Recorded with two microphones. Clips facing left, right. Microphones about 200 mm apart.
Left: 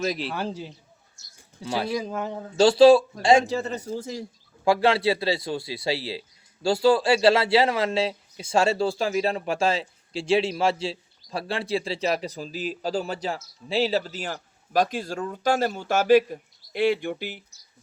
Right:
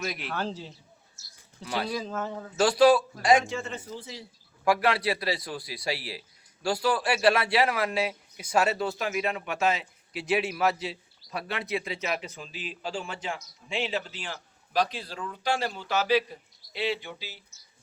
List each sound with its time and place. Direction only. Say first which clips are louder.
0.0 s a man's voice: left 7 dB; 30° left (ahead or behind)
0.3 s a man's voice: left 2 dB; 10° left (ahead or behind)
1.2 s bird: even; 5° right (ahead or behind)
1.6 s a man's voice: left 4 dB; 25° left (ahead or behind); by 4.3 s 45° left (ahead or behind)
4.6 s a man's voice: left 4 dB; 25° left (ahead or behind); by 17.4 s 55° left (ahead or behind)